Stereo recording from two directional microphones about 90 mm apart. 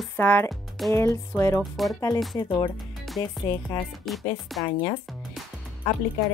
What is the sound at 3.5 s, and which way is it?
Speech, 35° left (ahead or behind).